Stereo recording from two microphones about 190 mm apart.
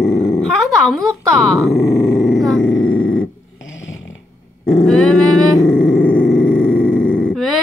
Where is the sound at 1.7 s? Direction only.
15° left (ahead or behind).